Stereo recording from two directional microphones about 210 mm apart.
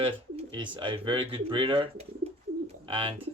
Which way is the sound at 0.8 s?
25° right (ahead or behind).